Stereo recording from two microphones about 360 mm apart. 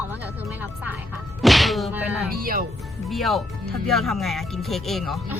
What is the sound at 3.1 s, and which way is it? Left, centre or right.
Speech, centre.